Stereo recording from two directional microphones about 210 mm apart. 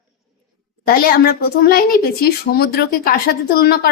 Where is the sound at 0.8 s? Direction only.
45° left (ahead or behind).